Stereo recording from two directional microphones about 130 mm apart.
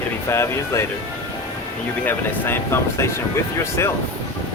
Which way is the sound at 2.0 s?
15° left (ahead or behind).